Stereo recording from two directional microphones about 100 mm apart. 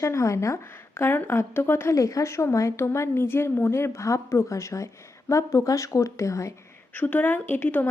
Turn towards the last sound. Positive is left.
turn(degrees=20)  # may be behind; listen again after turning